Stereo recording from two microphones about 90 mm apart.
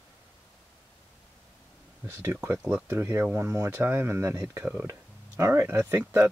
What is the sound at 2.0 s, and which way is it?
Speech, 30° right (ahead or behind).